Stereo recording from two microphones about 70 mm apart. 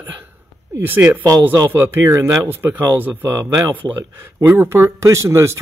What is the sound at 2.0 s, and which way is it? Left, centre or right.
Speech, right.